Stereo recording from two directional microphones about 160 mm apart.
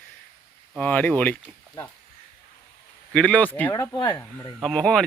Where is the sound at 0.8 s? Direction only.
10° left (ahead or behind).